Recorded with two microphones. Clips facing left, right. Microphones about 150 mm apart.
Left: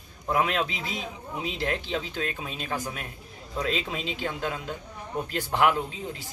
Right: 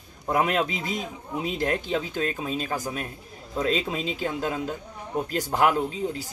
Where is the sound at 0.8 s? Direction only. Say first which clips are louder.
Right 3 dB; 45° right (ahead or behind).